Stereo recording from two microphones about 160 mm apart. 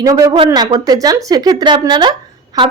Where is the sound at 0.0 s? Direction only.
20° right (ahead or behind).